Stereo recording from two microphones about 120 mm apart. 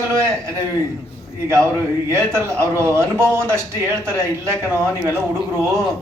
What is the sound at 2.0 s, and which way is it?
A man's voice, 20° right (ahead or behind).